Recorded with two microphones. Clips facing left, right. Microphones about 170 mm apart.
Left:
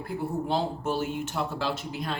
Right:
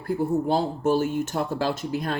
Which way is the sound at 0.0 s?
45° right (ahead or behind).